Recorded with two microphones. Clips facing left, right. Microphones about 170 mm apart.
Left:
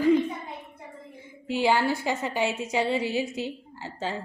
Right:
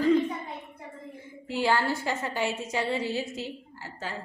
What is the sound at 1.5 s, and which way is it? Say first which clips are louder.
A woman's voice: left 3 dB; 15° left (ahead or behind).